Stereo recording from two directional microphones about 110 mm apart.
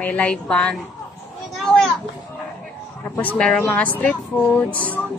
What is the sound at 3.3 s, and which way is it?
Speech, 10° left (ahead or behind).